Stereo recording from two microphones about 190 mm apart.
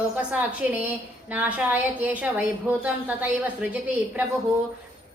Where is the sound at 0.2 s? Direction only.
5° right (ahead or behind).